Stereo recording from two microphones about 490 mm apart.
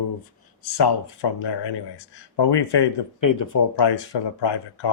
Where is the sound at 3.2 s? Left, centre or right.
Left.